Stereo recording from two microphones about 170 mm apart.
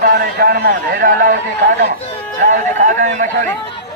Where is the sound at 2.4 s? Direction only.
45° right (ahead or behind).